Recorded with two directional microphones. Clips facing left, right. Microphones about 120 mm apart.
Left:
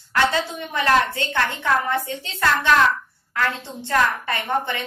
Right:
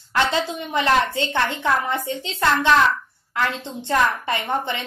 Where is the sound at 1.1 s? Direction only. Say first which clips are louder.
Right 1 dB; 25° right (ahead or behind).